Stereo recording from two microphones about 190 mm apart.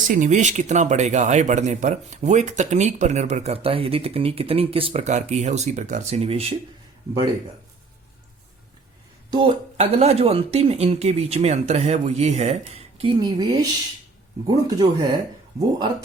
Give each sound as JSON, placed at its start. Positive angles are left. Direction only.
{"t": 0.1, "sound": "speech", "side_deg": -40}
{"t": 9.3, "sound": "speech", "side_deg": -30}